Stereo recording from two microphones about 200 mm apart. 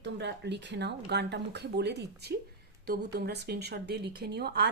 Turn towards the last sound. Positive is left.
turn(degrees=-55)  # may be behind; listen again after turning